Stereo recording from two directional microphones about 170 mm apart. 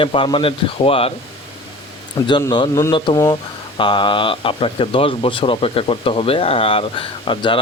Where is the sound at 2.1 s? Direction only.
25° left (ahead or behind).